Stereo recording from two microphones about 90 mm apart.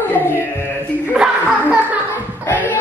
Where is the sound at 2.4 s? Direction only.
20° left (ahead or behind).